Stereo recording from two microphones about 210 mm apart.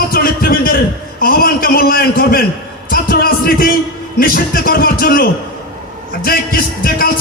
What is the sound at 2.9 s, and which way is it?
Music, 45° left (ahead or behind).